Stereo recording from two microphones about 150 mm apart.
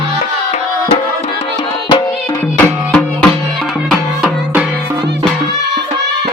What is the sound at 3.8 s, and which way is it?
Music, 5° right (ahead or behind).